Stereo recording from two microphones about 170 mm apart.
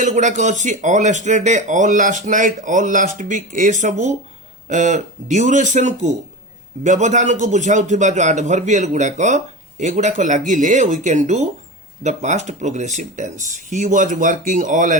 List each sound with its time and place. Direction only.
0.0 s a man's voice: 45° right (ahead or behind)